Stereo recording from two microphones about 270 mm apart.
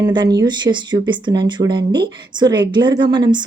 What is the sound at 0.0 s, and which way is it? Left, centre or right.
A woman's voice, centre.